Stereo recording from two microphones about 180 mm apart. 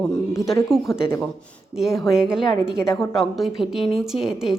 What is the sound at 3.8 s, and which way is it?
Speech, 30° left (ahead or behind).